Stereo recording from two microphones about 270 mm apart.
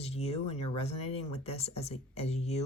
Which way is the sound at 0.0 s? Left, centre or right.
Left.